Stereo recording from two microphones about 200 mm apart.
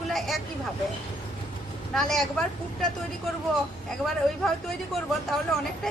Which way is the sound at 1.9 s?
Centre (ahead or behind).